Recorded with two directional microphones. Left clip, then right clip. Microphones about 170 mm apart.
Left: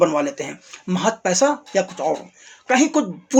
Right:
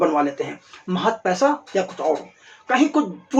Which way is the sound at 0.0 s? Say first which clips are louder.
Left 1 dB; 45° left (ahead or behind).